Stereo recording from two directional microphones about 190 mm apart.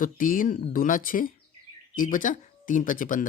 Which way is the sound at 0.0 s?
45° left (ahead or behind).